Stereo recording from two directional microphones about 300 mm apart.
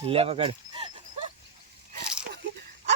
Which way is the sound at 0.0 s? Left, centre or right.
Centre.